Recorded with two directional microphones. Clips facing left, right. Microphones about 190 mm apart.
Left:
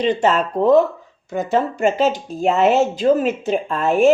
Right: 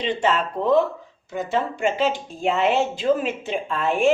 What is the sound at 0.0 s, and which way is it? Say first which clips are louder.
A woman's voice: left 5 dB; 40° left (ahead or behind).